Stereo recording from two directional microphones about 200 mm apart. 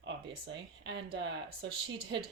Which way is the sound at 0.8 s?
60° right (ahead or behind).